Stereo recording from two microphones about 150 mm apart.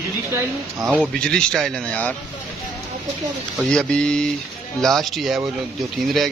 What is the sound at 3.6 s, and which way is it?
Speech, 5° left (ahead or behind).